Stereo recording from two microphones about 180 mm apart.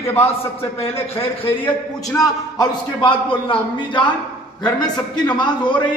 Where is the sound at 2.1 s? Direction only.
25° left (ahead or behind).